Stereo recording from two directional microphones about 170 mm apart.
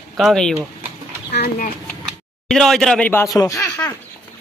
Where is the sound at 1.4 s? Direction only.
55° left (ahead or behind).